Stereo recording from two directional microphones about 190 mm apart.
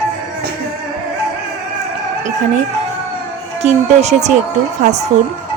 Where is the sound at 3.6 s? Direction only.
35° right (ahead or behind).